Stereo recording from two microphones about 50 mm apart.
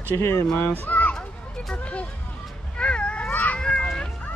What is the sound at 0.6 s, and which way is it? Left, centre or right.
Speech, left.